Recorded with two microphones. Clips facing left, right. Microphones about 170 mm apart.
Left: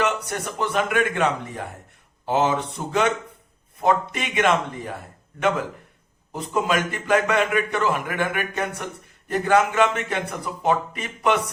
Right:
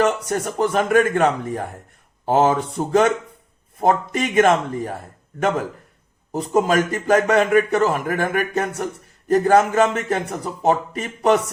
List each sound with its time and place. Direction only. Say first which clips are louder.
0.0 s a man's voice: right 5 dB; 45° right (ahead or behind)